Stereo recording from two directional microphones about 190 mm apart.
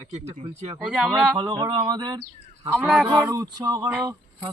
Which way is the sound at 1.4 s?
25° right (ahead or behind).